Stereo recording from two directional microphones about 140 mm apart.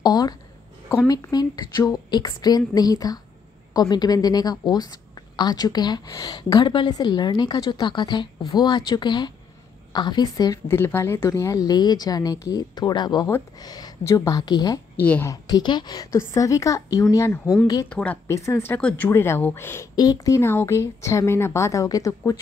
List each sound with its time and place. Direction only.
0.0 s a sound: 30° left (ahead or behind)
1.0 s a woman's voice: 25° left (ahead or behind)
15.0 s speech: 15° left (ahead or behind)
15.4 s a woman's voice: 30° left (ahead or behind)
17.8 s speech: 10° left (ahead or behind)
18.2 s a woman's voice: 20° left (ahead or behind)